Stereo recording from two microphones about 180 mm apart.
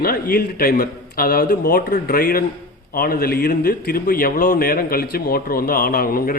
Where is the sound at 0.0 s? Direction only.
60° left (ahead or behind).